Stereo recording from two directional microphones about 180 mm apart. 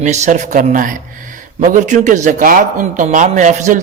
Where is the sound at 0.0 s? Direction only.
40° right (ahead or behind).